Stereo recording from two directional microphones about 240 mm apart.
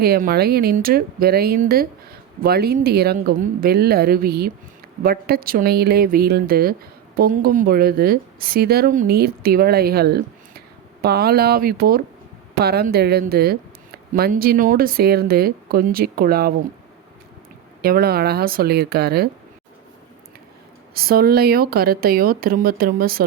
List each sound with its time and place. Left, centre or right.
0.0 s a woman's voice: right
17.8 s a woman's voice: right
20.9 s a woman's voice: right